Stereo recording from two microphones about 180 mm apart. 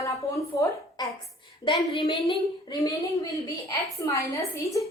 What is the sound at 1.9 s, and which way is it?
A woman's voice, 30° left (ahead or behind).